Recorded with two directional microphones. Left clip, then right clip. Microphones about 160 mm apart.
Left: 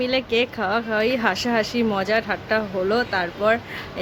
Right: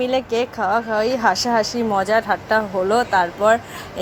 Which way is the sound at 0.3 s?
25° left (ahead or behind).